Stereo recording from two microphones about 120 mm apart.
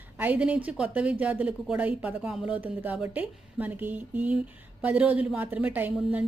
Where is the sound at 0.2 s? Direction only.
10° right (ahead or behind).